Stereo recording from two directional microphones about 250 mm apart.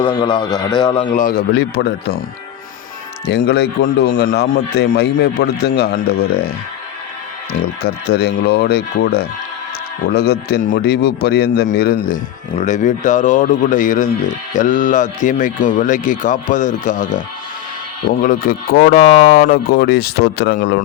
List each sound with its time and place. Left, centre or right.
0.0 s a man's voice: centre
1.1 s speech: left
3.2 s speech: left
7.8 s speech: left